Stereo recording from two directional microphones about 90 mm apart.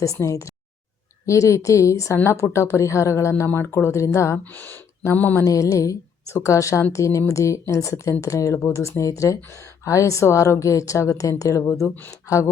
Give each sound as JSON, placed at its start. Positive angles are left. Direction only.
{"t": 0.0, "sound": "a woman's voice", "side_deg": 35}
{"t": 4.5, "sound": "mantra", "side_deg": 20}
{"t": 5.5, "sound": "a woman's voice", "side_deg": 35}